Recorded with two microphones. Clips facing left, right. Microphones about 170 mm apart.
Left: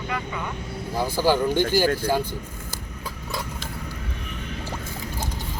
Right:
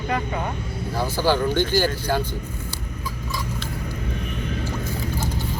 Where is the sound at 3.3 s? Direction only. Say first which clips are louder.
Right 1 dB; 60° left (ahead or behind).